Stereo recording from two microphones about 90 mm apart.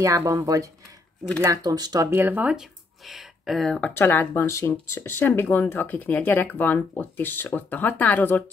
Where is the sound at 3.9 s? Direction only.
25° left (ahead or behind).